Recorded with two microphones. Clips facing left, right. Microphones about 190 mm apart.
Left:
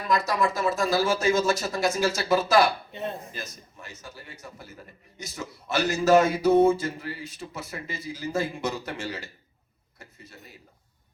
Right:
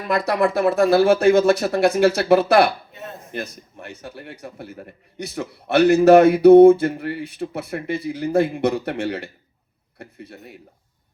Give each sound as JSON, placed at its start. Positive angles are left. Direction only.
{"t": 0.1, "sound": "a man's voice", "side_deg": -60}